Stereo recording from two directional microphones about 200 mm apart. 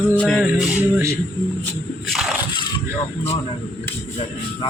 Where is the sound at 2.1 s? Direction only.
Centre (ahead or behind).